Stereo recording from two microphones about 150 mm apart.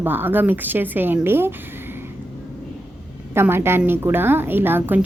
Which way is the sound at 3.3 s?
15° right (ahead or behind).